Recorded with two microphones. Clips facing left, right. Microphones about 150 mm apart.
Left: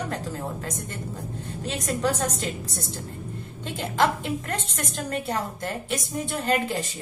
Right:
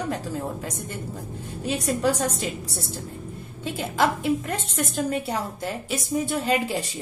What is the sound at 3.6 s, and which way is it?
A woman's voice, 5° right (ahead or behind).